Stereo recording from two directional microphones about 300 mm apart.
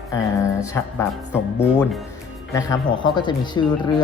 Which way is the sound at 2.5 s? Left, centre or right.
Centre.